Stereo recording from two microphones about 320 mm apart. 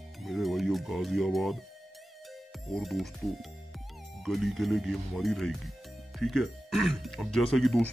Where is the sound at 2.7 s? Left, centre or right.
Centre.